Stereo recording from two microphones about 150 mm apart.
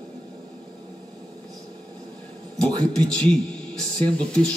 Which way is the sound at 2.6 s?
25° right (ahead or behind).